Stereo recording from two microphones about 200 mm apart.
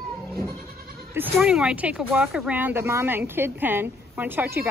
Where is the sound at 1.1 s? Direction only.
5° right (ahead or behind).